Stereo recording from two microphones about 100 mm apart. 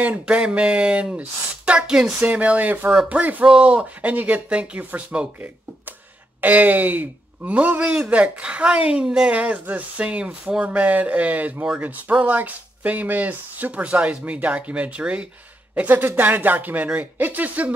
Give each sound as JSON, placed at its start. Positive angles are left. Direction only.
{"t": 0.0, "sound": "speech", "side_deg": -15}